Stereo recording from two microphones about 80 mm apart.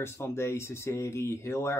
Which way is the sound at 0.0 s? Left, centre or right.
Left.